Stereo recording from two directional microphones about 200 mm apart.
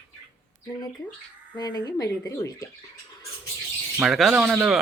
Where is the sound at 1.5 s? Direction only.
20° left (ahead or behind).